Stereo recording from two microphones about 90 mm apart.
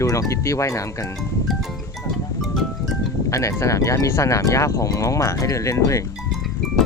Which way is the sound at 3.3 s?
35° left (ahead or behind).